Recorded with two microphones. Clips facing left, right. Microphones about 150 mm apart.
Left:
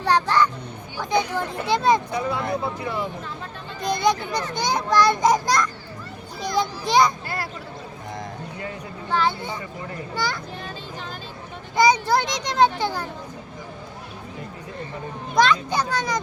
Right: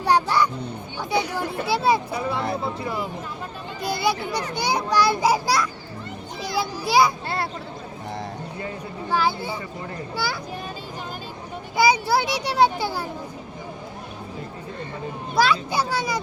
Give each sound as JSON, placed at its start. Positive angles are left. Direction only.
{"t": 0.0, "sound": "music", "side_deg": -10}
{"t": 1.1, "sound": "a child's voice", "side_deg": -10}
{"t": 2.1, "sound": "speech", "side_deg": -30}
{"t": 3.8, "sound": "a child's voice", "side_deg": -5}
{"t": 7.3, "sound": "speech", "side_deg": -25}
{"t": 9.0, "sound": "a child's voice", "side_deg": -5}
{"t": 11.8, "sound": "a child's voice", "side_deg": -10}
{"t": 15.4, "sound": "a child's voice", "side_deg": -10}